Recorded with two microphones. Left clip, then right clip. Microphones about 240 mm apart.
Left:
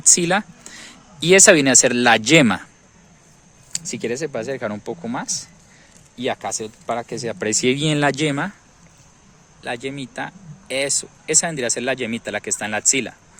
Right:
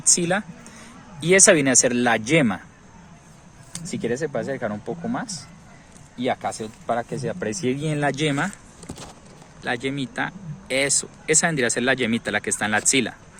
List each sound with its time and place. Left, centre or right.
0.0 s speech: left
3.7 s speech: left
9.6 s speech: centre